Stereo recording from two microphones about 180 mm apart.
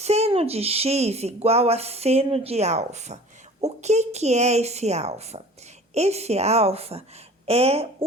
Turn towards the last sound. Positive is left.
turn(degrees=-35)  # may be behind; listen again after turning